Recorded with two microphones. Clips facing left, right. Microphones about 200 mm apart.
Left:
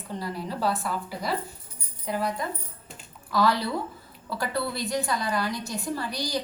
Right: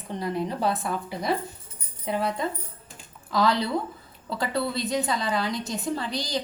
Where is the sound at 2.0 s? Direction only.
25° right (ahead or behind).